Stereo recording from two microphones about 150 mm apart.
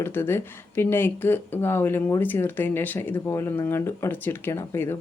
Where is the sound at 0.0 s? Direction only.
15° left (ahead or behind).